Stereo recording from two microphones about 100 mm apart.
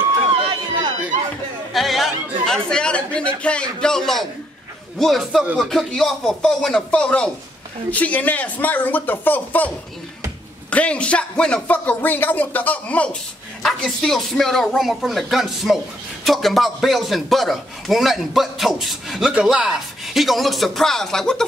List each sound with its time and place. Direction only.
1.7 s a man's voice: centre (ahead or behind); by 9.7 s 15° left (ahead or behind)
10.7 s a man's voice: 10° left (ahead or behind)